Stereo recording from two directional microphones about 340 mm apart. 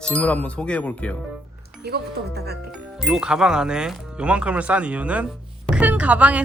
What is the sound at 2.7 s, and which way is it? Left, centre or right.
A woman's voice, centre.